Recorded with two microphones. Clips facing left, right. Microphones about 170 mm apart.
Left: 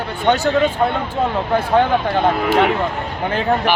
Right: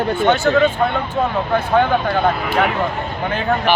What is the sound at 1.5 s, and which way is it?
Speech, 30° left (ahead or behind).